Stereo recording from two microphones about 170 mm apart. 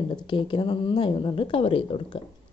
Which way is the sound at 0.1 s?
30° left (ahead or behind).